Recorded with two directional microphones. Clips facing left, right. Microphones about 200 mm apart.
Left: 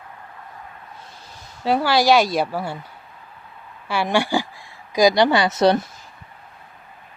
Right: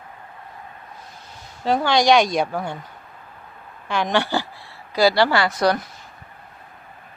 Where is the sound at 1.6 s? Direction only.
10° left (ahead or behind); by 5.9 s 25° left (ahead or behind).